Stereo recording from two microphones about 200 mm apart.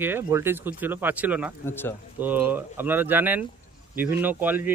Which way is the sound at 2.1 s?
10° right (ahead or behind).